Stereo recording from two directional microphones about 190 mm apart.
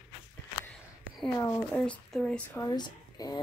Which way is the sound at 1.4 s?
20° left (ahead or behind).